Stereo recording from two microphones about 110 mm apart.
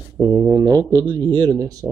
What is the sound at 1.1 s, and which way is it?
Speech, 50° right (ahead or behind).